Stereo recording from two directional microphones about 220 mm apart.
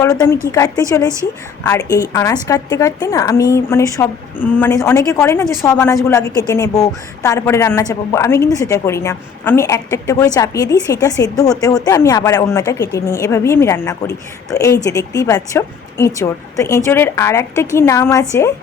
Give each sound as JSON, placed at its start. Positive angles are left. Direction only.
{"t": 0.0, "sound": "a woman's voice", "side_deg": 15}